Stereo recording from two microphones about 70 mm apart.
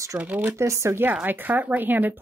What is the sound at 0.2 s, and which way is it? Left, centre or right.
Speech, right.